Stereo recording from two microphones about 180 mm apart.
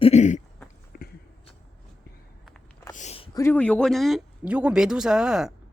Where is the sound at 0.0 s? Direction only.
40° left (ahead or behind).